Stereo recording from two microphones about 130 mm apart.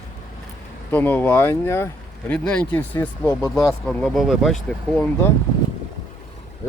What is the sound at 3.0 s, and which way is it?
Speech, 20° left (ahead or behind).